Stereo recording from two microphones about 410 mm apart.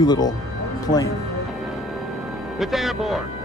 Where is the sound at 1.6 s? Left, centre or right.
Centre.